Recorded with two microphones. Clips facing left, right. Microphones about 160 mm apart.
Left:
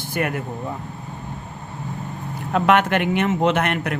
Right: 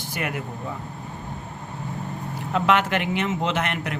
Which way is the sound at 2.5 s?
55° left (ahead or behind).